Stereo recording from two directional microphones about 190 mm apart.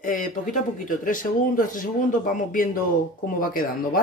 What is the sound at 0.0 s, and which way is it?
Speech, 45° left (ahead or behind).